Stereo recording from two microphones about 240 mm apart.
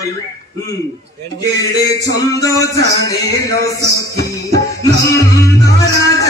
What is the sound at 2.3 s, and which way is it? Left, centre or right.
A man's voice, centre.